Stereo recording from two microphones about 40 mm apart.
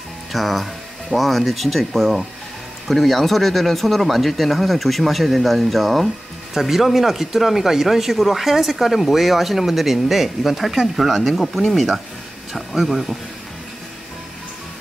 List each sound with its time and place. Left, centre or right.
0.3 s speech: centre